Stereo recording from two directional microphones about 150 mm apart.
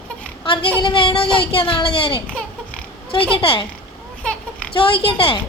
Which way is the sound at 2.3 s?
10° left (ahead or behind).